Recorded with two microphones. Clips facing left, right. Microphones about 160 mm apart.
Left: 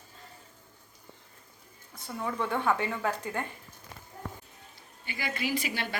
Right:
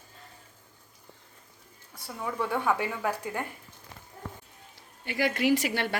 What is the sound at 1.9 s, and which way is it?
Speech, 10° right (ahead or behind).